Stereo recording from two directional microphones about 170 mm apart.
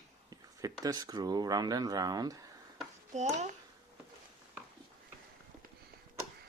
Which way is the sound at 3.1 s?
45° right (ahead or behind).